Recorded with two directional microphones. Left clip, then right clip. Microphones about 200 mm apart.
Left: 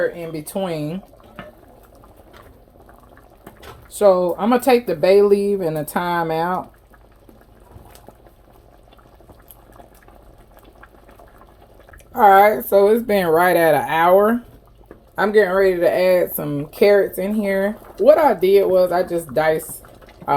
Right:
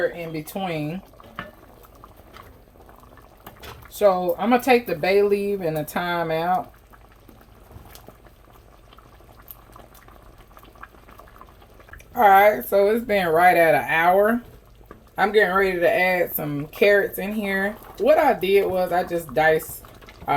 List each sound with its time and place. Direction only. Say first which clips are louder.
0.4 s speech: left 5 dB; 40° left (ahead or behind)
3.9 s speech: left 4 dB; 40° left (ahead or behind)
12.1 s speech: left 3 dB; 45° left (ahead or behind)